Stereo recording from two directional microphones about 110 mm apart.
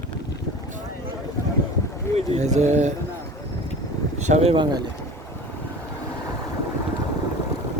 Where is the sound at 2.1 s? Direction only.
90° right.